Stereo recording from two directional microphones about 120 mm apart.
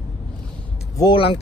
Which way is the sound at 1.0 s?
45° left (ahead or behind).